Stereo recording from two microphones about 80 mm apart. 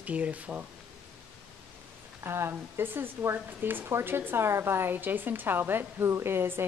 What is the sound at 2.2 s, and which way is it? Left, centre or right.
Speech, right.